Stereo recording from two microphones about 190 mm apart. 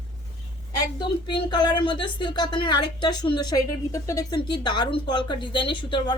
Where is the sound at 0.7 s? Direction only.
25° left (ahead or behind).